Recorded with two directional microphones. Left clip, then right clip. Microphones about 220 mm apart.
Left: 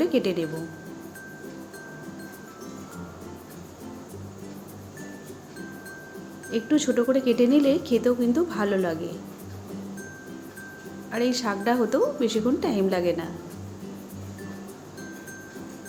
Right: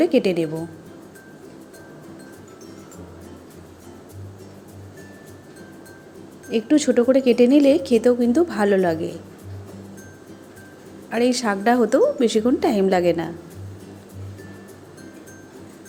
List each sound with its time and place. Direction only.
0.0 s a woman's voice: 25° right (ahead or behind)
6.5 s a woman's voice: 25° right (ahead or behind)
11.1 s a woman's voice: 25° right (ahead or behind)